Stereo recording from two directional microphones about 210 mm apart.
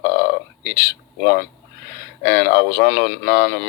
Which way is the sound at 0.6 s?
50° left (ahead or behind).